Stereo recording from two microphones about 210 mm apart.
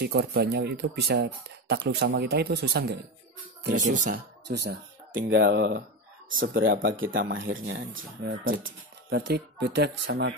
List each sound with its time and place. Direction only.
0.0 s speech: 50° right (ahead or behind)
3.6 s speech: 40° right (ahead or behind)
4.5 s speech: 55° right (ahead or behind)
6.9 s speech: 65° right (ahead or behind)